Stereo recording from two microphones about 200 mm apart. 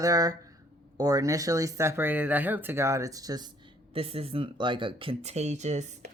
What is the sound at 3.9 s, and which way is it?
Speech, 30° right (ahead or behind).